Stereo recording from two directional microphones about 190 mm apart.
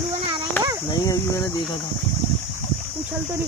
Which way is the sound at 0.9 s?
15° left (ahead or behind).